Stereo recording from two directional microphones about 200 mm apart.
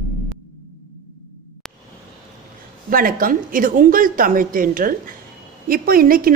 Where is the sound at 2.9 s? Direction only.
45° right (ahead or behind).